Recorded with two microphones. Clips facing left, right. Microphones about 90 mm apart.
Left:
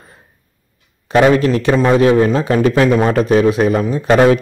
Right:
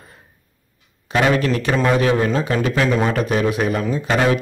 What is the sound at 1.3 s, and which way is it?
A man's voice, 30° left (ahead or behind).